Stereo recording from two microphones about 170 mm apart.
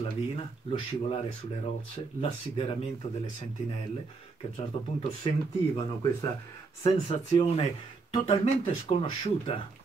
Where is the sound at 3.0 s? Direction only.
45° left (ahead or behind).